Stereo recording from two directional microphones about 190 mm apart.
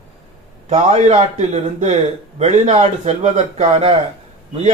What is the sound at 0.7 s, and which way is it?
A man's voice, 35° right (ahead or behind).